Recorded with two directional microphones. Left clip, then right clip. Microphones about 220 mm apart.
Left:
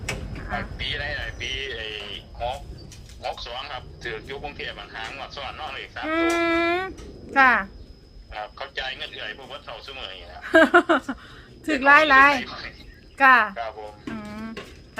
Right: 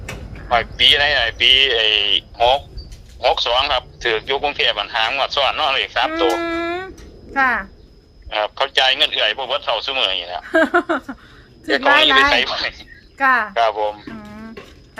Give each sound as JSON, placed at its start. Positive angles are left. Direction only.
{"t": 0.5, "sound": "a man's voice", "side_deg": -45}
{"t": 6.1, "sound": "speech", "side_deg": 5}
{"t": 8.3, "sound": "a man's voice", "side_deg": -45}
{"t": 10.4, "sound": "speech", "side_deg": 5}
{"t": 12.4, "sound": "a man's voice", "side_deg": -45}
{"t": 13.1, "sound": "speech", "side_deg": 5}
{"t": 13.5, "sound": "a man's voice", "side_deg": -45}
{"t": 14.2, "sound": "music", "side_deg": 5}